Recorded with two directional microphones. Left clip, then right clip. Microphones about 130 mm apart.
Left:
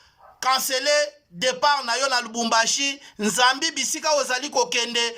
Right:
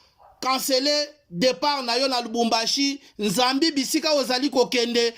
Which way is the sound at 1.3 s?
60° right (ahead or behind).